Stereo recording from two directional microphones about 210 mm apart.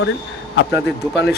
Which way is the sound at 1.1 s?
55° left (ahead or behind).